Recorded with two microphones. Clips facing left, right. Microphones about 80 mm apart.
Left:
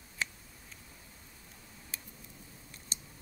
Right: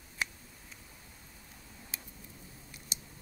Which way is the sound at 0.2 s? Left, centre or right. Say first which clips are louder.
Right 1 dB; centre.